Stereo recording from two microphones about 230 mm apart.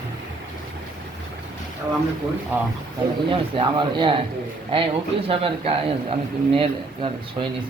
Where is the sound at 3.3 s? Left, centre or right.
Right.